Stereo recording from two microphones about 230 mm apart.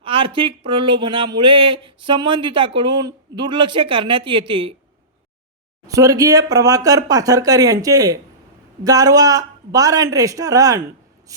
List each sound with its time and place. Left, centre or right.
0.0 s speech: right
5.9 s speech: centre
11.3 s writing: centre